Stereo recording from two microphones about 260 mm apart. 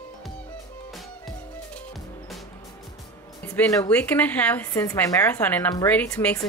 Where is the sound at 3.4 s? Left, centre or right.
Centre.